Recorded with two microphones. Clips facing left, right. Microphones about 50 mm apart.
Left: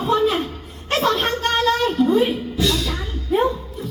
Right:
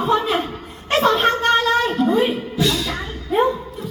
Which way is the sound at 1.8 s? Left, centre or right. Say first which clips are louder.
Left 1 dB; right.